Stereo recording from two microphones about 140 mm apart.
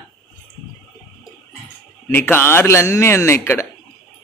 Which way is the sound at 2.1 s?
15° left (ahead or behind).